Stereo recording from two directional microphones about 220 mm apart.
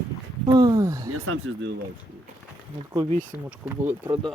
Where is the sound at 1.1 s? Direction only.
75° right (ahead or behind); by 1.7 s 60° right (ahead or behind).